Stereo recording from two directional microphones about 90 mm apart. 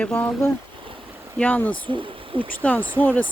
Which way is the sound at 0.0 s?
15° left (ahead or behind).